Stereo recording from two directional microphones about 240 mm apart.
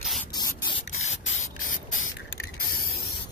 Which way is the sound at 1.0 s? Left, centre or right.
Left.